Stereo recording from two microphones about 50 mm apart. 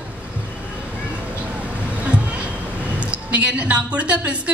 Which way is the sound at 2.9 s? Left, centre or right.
Right.